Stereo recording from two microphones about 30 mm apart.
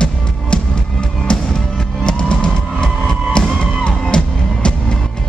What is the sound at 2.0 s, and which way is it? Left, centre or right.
Music, left.